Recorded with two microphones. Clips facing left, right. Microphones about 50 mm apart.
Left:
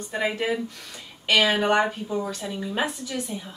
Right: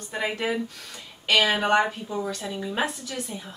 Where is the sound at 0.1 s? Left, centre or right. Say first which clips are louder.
Left 1 dB; centre.